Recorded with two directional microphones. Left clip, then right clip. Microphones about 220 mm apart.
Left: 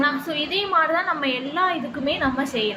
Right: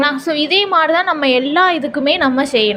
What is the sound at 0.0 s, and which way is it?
A woman's voice, 40° right (ahead or behind).